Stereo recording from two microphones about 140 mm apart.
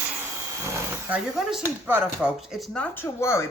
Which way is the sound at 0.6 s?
20° right (ahead or behind).